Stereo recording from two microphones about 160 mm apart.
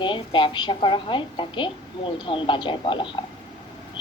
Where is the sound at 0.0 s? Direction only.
30° left (ahead or behind).